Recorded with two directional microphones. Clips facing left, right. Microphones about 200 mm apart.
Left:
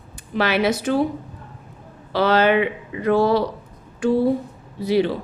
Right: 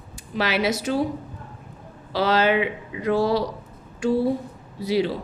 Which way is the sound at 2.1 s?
55° left (ahead or behind).